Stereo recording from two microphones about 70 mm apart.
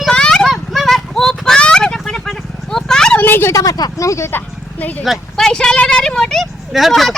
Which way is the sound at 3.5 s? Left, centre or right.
Left.